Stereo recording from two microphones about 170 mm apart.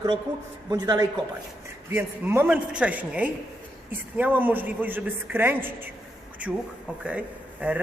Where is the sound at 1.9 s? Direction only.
15° right (ahead or behind).